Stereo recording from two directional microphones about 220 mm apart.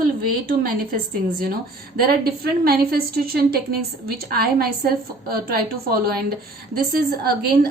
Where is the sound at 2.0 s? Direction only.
45° right (ahead or behind).